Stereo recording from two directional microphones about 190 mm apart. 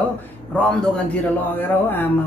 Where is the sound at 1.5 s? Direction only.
10° left (ahead or behind).